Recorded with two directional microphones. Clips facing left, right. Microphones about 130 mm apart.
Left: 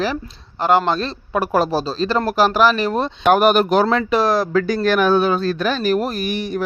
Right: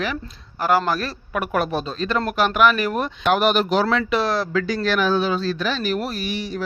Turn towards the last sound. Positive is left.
turn(degrees=50)  # may be behind; listen again after turning